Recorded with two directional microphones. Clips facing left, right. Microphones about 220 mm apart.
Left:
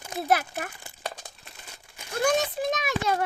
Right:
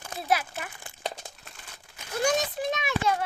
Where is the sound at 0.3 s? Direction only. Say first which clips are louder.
Left 2 dB; 55° left (ahead or behind).